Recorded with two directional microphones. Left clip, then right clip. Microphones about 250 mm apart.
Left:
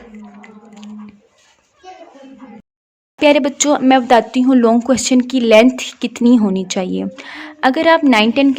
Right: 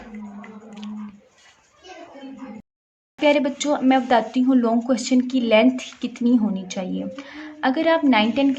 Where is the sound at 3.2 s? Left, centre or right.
Left.